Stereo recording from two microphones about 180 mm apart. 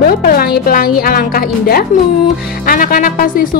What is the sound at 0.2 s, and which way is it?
A woman's voice, 55° left (ahead or behind).